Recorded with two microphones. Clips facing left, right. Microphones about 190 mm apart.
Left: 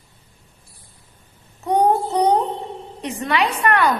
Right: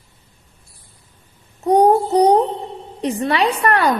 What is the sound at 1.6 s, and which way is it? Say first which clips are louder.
Child singing: right 4 dB; 35° right (ahead or behind).